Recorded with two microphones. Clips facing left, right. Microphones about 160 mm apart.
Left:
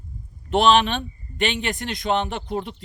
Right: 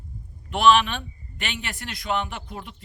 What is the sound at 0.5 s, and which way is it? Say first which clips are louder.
A man's voice: left 2 dB; 25° left (ahead or behind).